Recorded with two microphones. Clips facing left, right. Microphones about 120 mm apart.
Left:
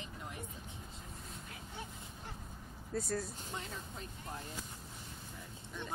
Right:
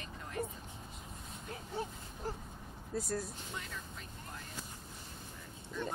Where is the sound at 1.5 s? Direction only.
35° right (ahead or behind).